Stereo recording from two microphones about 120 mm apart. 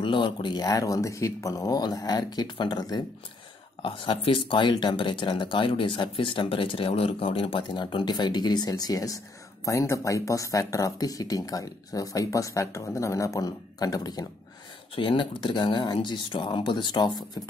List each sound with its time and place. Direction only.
0.0 s speech: 40° left (ahead or behind)